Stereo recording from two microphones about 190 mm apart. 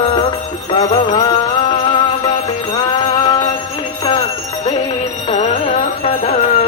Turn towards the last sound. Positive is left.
turn(degrees=35)  # may be behind; listen again after turning